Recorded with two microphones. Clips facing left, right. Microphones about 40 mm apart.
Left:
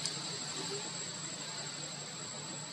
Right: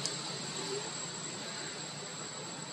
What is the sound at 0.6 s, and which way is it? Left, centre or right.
Vehicle, centre.